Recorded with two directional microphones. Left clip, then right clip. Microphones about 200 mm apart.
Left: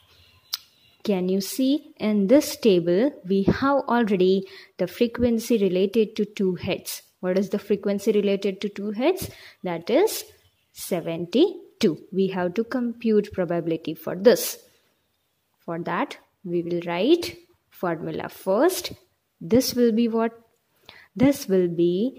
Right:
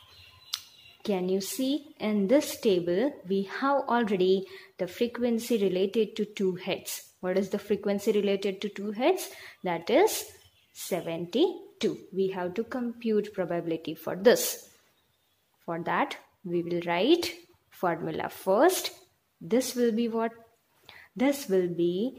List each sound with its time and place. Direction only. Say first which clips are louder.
1.0 s a woman's voice: left 4 dB; 35° left (ahead or behind)
15.6 s a woman's voice: left 2 dB; 25° left (ahead or behind)